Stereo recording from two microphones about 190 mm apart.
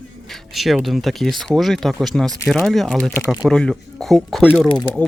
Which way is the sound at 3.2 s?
10° right (ahead or behind).